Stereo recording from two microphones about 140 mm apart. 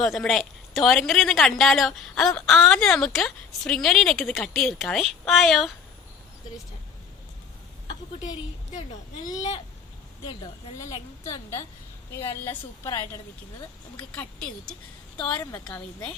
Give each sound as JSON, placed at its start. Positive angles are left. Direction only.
{"t": 0.0, "sound": "a woman's voice", "side_deg": 5}
{"t": 9.2, "sound": "a woman's voice", "side_deg": 25}
{"t": 13.9, "sound": "speech", "side_deg": 10}